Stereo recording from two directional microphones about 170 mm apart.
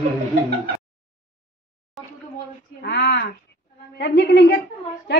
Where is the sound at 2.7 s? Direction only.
70° left (ahead or behind).